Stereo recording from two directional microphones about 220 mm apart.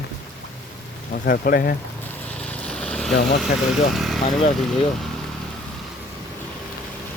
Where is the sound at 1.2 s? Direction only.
40° left (ahead or behind).